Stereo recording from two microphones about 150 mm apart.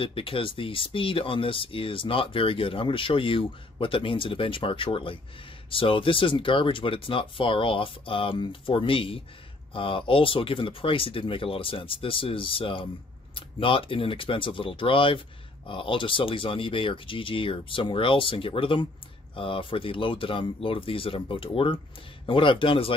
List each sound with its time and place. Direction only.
0.0 s speech: 35° left (ahead or behind)